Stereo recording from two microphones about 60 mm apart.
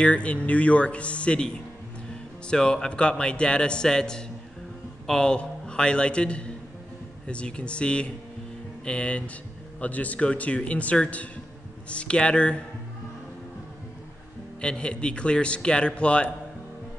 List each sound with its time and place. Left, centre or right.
0.0 s a man's voice: left
14.6 s a man's voice: centre